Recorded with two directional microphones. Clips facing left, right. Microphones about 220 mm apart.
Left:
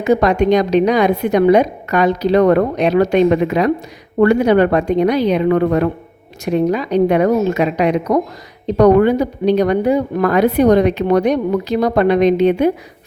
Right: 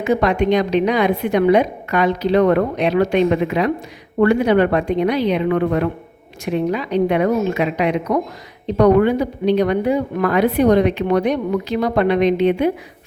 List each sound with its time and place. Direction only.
0.0 s speech: 40° left (ahead or behind)